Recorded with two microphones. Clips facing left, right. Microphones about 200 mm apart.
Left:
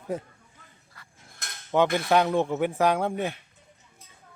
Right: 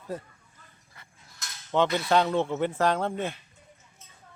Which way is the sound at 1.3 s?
55° left (ahead or behind).